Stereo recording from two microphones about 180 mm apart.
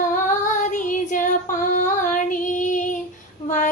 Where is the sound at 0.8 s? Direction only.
45° left (ahead or behind).